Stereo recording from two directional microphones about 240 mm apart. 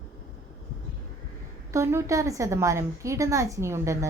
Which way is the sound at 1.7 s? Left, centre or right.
Centre.